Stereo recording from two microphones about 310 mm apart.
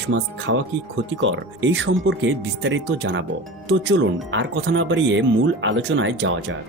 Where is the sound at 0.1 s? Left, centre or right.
Right.